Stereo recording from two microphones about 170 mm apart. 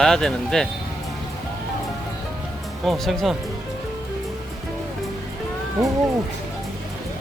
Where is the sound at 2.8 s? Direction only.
Centre (ahead or behind).